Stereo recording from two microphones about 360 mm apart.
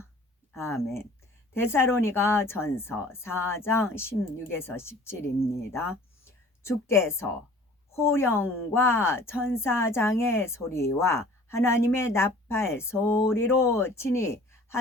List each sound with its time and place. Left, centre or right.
0.5 s speech: centre